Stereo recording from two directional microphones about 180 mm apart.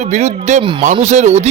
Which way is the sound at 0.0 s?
40° right (ahead or behind).